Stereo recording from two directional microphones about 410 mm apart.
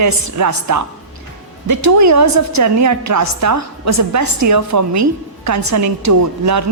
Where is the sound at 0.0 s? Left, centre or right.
Right.